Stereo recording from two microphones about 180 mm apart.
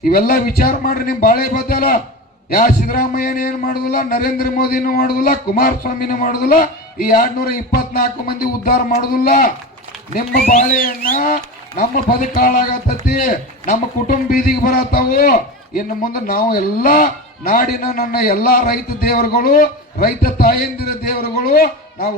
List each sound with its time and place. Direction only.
0.0 s a man's voice: 50° left (ahead or behind)
12.4 s a man's voice: 50° left (ahead or behind)